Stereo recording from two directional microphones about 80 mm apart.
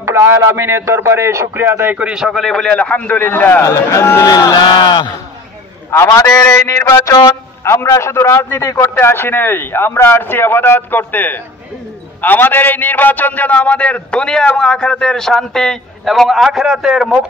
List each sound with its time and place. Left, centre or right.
0.0 s a man's voice: right
2.0 s a man's voice: centre; by 3.6 s left
3.6 s a man's voice: left
4.3 s speech: left
5.9 s a man's voice: left
6.4 s a man's voice: left
8.9 s a man's voice: left; by 17.2 s centre